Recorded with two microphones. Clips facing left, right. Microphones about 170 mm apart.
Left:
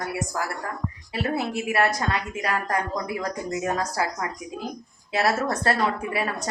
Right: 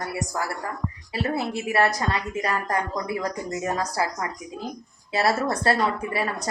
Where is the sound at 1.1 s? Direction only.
30° right (ahead or behind).